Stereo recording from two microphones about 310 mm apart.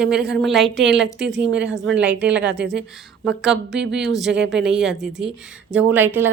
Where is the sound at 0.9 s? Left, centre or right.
Right.